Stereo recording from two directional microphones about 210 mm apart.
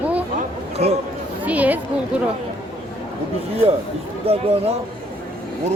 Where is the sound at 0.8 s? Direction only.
30° right (ahead or behind).